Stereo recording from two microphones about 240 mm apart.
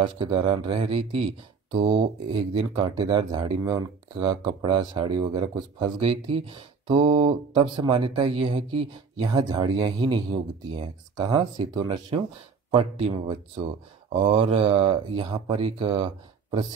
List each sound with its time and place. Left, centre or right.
0.0 s speech: centre